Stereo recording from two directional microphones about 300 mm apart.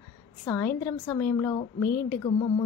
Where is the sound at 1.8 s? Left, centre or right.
Left.